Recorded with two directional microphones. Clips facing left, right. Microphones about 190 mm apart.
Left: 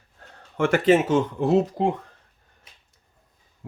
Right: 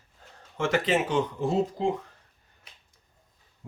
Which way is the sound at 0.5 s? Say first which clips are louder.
Left 7 dB; 55° left (ahead or behind).